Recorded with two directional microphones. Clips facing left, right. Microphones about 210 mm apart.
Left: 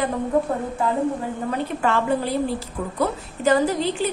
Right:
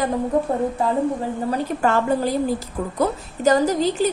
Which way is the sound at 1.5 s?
40° right (ahead or behind).